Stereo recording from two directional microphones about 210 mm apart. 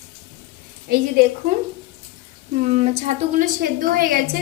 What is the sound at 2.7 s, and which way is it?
A woman's voice, 35° right (ahead or behind).